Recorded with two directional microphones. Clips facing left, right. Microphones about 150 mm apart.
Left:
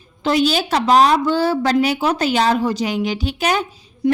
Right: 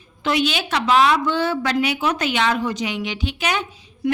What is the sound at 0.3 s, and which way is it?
A woman's voice, 35° left (ahead or behind).